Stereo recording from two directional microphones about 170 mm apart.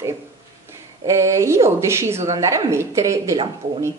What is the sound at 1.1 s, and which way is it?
Speech, 15° right (ahead or behind).